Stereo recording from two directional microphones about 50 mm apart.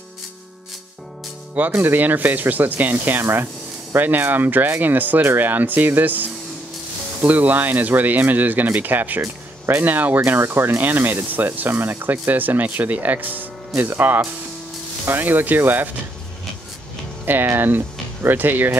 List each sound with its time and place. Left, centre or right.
1.8 s speech: right
10.4 s speech: right
17.2 s speech: right